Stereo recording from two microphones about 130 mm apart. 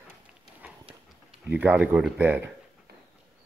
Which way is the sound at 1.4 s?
15° right (ahead or behind).